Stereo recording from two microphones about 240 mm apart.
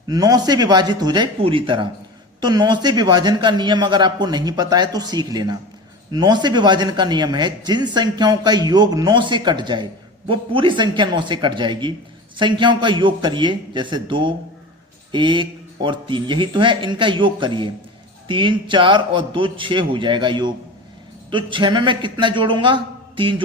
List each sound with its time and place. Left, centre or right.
0.1 s a man's voice: centre